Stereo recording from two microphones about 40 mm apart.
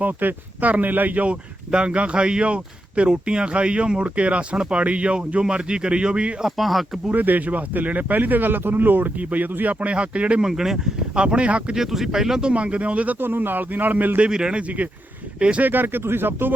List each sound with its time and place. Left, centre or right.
0.0 s speech: right
1.7 s speech: right
4.5 s speech: centre
4.8 s speech: right
6.4 s speech: centre
7.1 s speech: right
9.8 s speech: right
10.4 s speech: centre
11.1 s speech: right
11.7 s speech: centre
12.4 s speech: right
13.1 s speech: right
14.3 s speech: right
15.6 s speech: right